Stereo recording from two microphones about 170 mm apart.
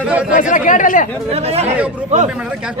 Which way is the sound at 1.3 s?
35° right (ahead or behind).